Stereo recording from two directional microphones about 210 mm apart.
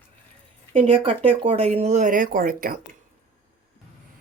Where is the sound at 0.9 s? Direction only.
25° right (ahead or behind); by 2.8 s 45° right (ahead or behind).